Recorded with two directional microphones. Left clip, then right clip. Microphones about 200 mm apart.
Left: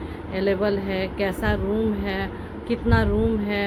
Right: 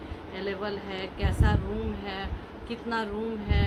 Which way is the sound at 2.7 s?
15° left (ahead or behind).